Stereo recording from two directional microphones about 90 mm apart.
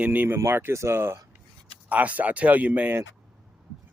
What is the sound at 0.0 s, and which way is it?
Speech, 20° right (ahead or behind).